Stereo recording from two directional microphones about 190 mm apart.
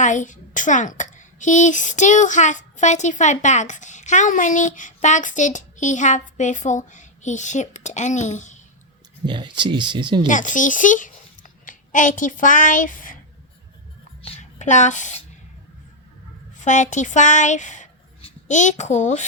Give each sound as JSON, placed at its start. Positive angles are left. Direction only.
{"t": 0.0, "sound": "a woman's voice", "side_deg": 40}
{"t": 9.2, "sound": "speech", "side_deg": -25}
{"t": 10.2, "sound": "a child's voice", "side_deg": 40}
{"t": 14.2, "sound": "a sound", "side_deg": 40}
{"t": 16.6, "sound": "speech", "side_deg": 40}